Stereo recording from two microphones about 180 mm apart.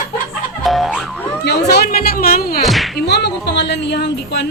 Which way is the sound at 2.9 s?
65° left (ahead or behind).